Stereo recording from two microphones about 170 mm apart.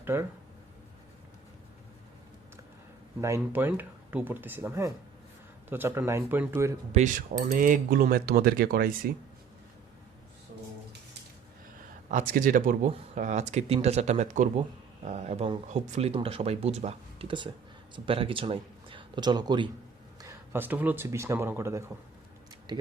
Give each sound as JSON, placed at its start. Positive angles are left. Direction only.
{"t": 0.0, "sound": "speech", "side_deg": -15}
{"t": 3.2, "sound": "speech", "side_deg": -15}
{"t": 6.9, "sound": "speech", "side_deg": -45}
{"t": 12.1, "sound": "speech", "side_deg": -55}
{"t": 20.5, "sound": "speech", "side_deg": -10}